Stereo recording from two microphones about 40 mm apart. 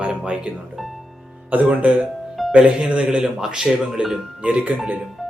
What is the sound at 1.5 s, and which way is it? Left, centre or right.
Speech, right.